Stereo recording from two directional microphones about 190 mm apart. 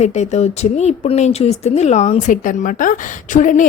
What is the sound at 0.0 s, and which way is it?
A woman's voice, 35° left (ahead or behind).